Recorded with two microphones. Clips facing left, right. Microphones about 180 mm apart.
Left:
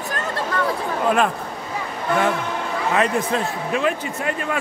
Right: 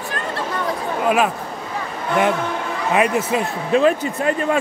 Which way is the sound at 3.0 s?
5° right (ahead or behind).